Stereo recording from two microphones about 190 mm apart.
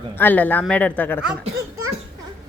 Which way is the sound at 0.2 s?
10° left (ahead or behind).